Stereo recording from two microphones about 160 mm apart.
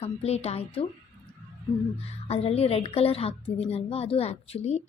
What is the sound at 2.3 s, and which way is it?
Speech, 40° left (ahead or behind).